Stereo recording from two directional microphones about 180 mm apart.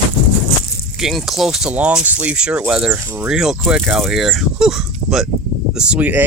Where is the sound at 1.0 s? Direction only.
Centre (ahead or behind).